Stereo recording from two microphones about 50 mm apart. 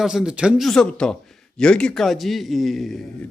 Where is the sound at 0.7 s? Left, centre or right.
Centre.